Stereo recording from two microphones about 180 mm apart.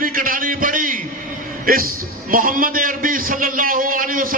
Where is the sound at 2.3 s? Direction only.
50° right (ahead or behind).